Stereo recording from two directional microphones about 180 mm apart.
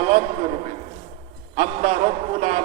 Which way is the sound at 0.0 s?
40° right (ahead or behind).